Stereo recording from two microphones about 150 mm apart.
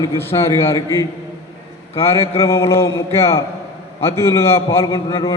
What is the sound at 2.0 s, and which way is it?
A man's voice, 15° left (ahead or behind).